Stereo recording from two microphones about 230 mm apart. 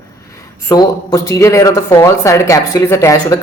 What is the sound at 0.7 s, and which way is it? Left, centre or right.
A woman's voice, centre.